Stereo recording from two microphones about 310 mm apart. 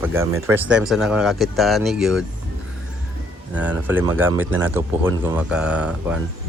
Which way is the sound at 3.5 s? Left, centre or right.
Centre.